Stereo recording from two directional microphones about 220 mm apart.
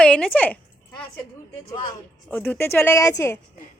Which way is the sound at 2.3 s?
10° left (ahead or behind).